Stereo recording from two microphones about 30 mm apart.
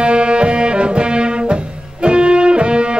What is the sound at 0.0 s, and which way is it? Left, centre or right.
Music, right.